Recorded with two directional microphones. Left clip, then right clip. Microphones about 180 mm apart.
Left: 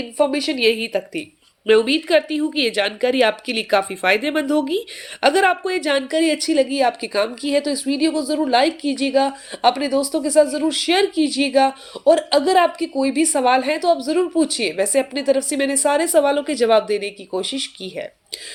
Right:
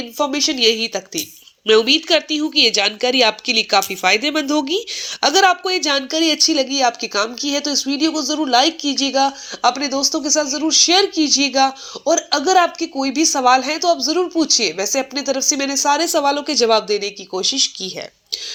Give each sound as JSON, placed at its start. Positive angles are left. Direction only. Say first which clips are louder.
{"t": 0.2, "sound": "speech", "louder": "right 1 dB", "side_deg": -15}